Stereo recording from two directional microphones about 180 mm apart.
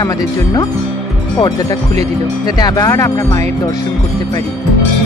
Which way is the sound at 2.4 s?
20° left (ahead or behind).